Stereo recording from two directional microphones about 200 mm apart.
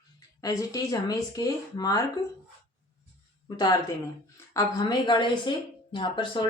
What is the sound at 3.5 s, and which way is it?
Speech, 20° left (ahead or behind).